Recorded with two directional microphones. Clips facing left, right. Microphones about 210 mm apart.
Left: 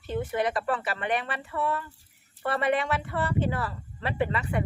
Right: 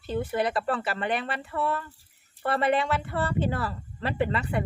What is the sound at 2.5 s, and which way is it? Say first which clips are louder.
A woman's voice: right 1 dB; 30° right (ahead or behind).